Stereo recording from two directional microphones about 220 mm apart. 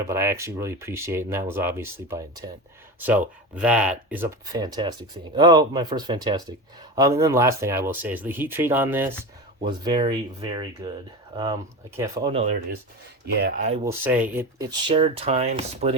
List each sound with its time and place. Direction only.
0.1 s speech: 10° right (ahead or behind)
9.6 s speech: 20° right (ahead or behind)
11.9 s speech: 15° right (ahead or behind)
13.2 s speech: 45° right (ahead or behind)
13.8 s speech: 10° right (ahead or behind)
14.7 s speech: 25° right (ahead or behind)